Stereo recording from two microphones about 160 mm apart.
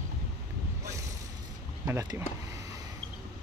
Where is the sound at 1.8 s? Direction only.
20° right (ahead or behind).